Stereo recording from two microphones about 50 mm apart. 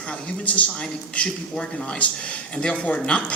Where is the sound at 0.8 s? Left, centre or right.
Centre.